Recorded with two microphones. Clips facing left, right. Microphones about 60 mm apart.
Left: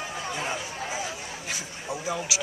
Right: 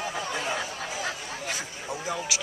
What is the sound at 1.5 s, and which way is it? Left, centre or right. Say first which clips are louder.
Speech: left 1 dB; centre.